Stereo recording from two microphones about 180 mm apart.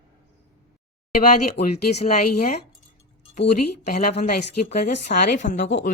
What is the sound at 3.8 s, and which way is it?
Speech, 45° left (ahead or behind).